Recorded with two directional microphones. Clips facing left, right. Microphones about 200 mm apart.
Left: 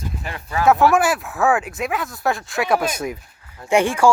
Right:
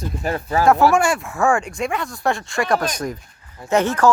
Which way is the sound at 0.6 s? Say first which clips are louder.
Even; centre (ahead or behind).